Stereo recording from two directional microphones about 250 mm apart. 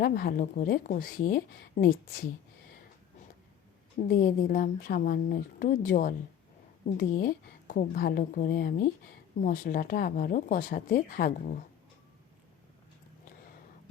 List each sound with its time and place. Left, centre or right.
0.0 s speech: left
4.1 s speech: left